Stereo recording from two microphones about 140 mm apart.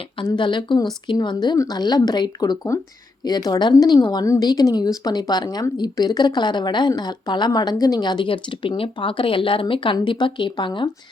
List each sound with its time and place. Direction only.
0.0 s a woman's voice: 35° left (ahead or behind)